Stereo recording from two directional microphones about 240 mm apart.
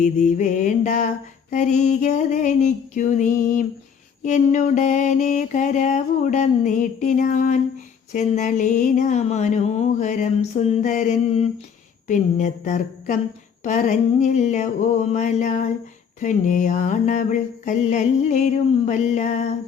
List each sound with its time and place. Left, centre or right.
0.0 s mantra: left